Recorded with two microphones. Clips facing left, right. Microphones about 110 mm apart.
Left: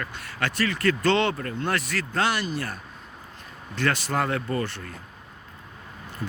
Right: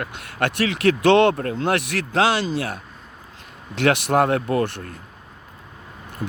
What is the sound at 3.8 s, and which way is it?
Speech, 65° right (ahead or behind).